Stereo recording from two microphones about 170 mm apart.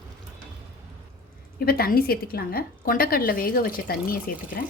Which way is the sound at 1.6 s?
60° left (ahead or behind).